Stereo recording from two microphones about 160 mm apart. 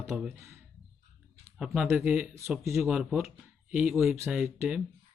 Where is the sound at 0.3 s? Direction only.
15° right (ahead or behind).